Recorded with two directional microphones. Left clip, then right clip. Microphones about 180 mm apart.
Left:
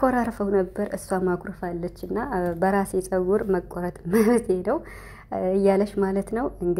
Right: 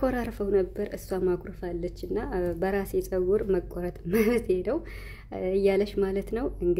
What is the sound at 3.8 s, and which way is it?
Speech, 15° right (ahead or behind).